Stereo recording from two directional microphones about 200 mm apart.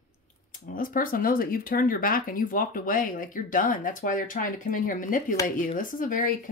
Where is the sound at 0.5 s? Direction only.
45° left (ahead or behind).